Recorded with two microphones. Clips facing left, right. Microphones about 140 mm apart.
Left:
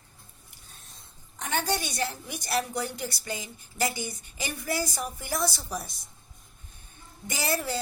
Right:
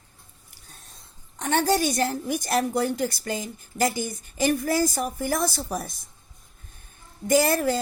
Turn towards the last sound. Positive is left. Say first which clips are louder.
# right 10 dB
turn(degrees=-50)  # may be behind; listen again after turning